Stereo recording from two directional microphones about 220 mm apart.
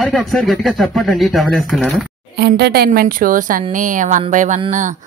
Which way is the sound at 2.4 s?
45° right (ahead or behind).